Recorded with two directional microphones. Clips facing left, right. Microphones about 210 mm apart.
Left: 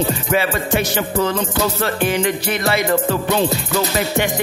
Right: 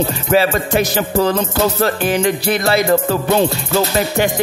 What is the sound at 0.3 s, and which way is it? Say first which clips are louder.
Music: right 7 dB; 35° right (ahead or behind).